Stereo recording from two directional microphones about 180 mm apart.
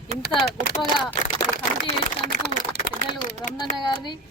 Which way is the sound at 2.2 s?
45° right (ahead or behind).